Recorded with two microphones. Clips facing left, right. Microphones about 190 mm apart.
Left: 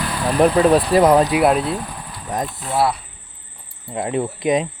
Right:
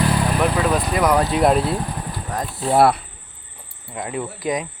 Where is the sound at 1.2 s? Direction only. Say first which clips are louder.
Left 1 dB; 5° left (ahead or behind).